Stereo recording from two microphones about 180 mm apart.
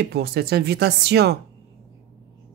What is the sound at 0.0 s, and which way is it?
Speech, 65° right (ahead or behind).